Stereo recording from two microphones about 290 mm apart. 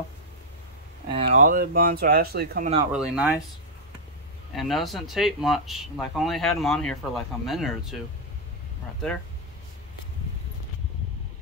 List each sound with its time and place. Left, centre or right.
1.0 s speech: right
2.9 s speech: centre
4.6 s speech: centre